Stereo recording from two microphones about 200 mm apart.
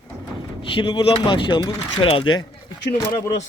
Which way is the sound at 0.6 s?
25° left (ahead or behind).